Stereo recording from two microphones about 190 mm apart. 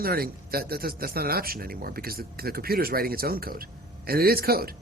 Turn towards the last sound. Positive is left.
turn(degrees=-55)  # may be behind; listen again after turning